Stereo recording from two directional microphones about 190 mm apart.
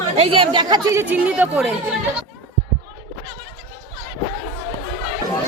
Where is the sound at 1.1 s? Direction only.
10° right (ahead or behind).